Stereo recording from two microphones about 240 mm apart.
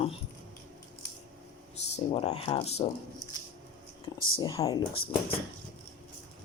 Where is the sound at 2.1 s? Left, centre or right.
Left.